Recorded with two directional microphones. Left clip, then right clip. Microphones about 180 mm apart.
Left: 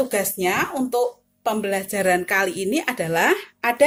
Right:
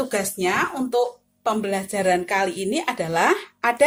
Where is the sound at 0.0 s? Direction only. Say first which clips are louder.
Left 2 dB; 10° left (ahead or behind).